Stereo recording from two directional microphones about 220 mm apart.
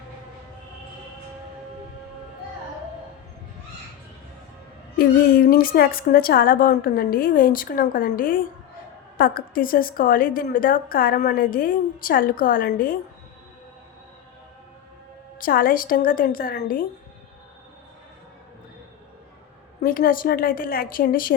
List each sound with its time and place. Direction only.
4.9 s a woman's voice: 40° left (ahead or behind)
15.4 s a woman's voice: 40° left (ahead or behind)
19.8 s a woman's voice: 40° left (ahead or behind)